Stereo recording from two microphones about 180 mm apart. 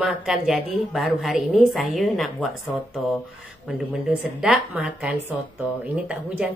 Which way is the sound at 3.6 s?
5° right (ahead or behind).